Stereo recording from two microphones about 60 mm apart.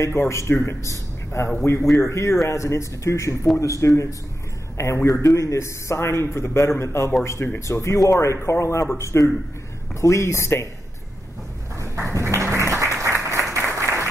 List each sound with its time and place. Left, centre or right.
0.0 s a man's voice: left
5.2 s a man's voice: left
7.7 s a man's voice: left
11.8 s applause: right